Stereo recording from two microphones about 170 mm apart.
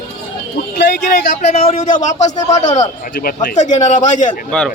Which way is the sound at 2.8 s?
55° left (ahead or behind).